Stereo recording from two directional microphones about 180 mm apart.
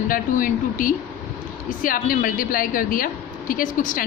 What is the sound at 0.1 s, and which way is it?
A woman's voice, 50° left (ahead or behind).